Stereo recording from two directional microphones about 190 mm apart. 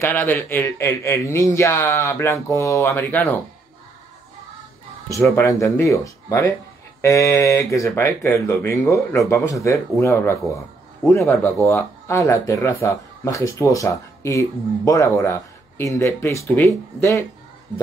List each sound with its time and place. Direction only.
0.2 s speech: 10° left (ahead or behind)
5.1 s speech: 15° left (ahead or behind)